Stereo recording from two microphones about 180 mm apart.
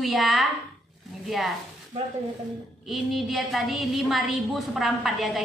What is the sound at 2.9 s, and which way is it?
A woman's voice, centre (ahead or behind).